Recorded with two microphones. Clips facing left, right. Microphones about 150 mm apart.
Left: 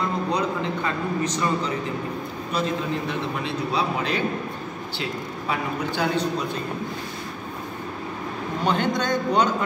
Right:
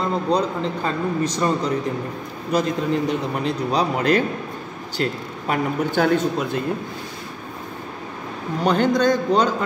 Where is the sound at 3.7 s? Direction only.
45° right (ahead or behind).